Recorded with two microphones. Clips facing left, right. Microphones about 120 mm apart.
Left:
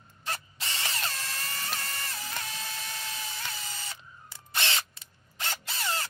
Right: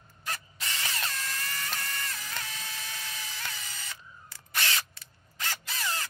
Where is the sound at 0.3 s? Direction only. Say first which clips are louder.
Left 1 dB; 30° left (ahead or behind).